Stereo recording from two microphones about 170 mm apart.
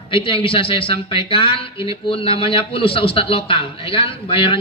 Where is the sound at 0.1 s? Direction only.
35° left (ahead or behind).